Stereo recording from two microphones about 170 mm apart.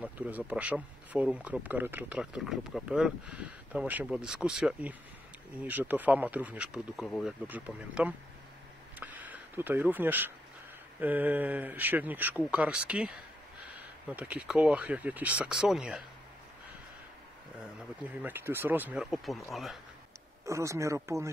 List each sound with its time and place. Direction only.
0.0 s speech: 10° right (ahead or behind)
7.4 s speech: 10° right (ahead or behind)
9.0 s a sound: 10° right (ahead or behind)
11.0 s speech: 10° right (ahead or behind)
18.0 s speech: 10° right (ahead or behind)
20.4 s speech: 15° right (ahead or behind)